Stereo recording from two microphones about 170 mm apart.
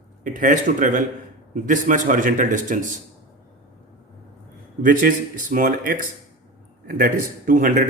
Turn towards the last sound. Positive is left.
turn(degrees=-55)  # may be behind; listen again after turning